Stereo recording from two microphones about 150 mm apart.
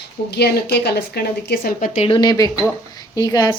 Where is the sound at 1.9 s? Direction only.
45° left (ahead or behind).